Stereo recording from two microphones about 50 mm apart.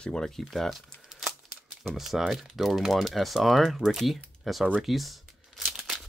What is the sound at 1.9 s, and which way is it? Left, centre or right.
Speech, centre.